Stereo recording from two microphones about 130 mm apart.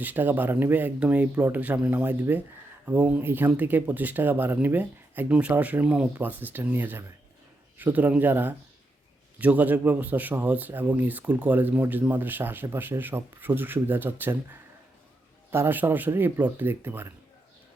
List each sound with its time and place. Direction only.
0.0 s speech: 15° right (ahead or behind)